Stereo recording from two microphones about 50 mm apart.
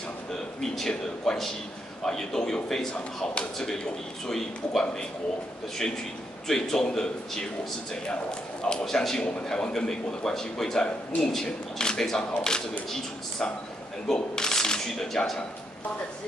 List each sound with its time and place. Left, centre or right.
0.6 s a man's voice: centre
6.4 s a man's voice: centre